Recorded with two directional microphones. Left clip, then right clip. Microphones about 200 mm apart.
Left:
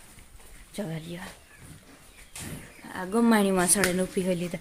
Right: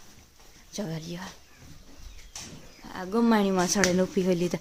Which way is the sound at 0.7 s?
15° right (ahead or behind).